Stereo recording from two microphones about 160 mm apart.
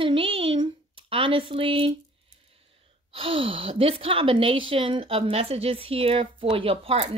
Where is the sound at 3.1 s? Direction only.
35° right (ahead or behind).